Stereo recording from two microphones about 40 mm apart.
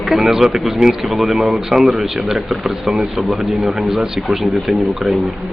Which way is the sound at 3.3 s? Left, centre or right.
Centre.